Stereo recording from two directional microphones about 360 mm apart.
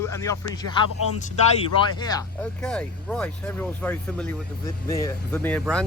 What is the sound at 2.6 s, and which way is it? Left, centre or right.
A man's voice, centre.